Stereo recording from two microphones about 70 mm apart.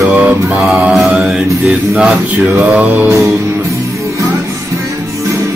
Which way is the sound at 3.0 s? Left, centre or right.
Right.